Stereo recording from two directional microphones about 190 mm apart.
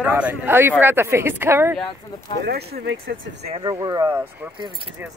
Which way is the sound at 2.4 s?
60° right (ahead or behind).